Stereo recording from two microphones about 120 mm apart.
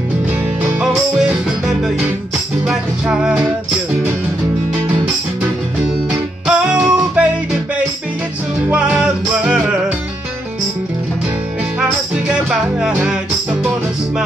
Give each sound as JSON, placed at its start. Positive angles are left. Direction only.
{"t": 2.6, "sound": "music", "side_deg": -5}
{"t": 6.0, "sound": "music", "side_deg": -5}
{"t": 8.7, "sound": "music", "side_deg": -10}
{"t": 12.3, "sound": "music", "side_deg": -5}